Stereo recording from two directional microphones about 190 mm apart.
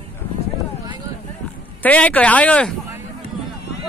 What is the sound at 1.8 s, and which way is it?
Speech, 5° left (ahead or behind).